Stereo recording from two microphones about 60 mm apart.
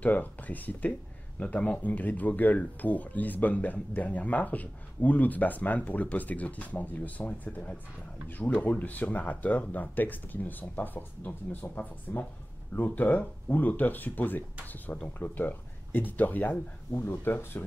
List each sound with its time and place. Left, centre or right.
0.0 s speech: left